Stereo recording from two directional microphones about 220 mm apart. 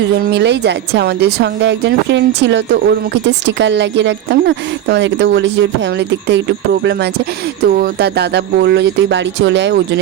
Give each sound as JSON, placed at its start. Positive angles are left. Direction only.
{"t": 0.2, "sound": "speech", "side_deg": -50}
{"t": 7.6, "sound": "speech", "side_deg": -45}